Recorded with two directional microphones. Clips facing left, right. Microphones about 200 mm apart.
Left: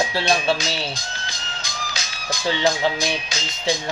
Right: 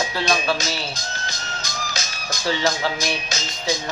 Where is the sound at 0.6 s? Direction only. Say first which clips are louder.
Left 1 dB; 45° right (ahead or behind).